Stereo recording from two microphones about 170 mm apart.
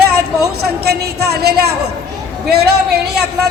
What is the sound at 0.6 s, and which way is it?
A man's voice, 70° right (ahead or behind).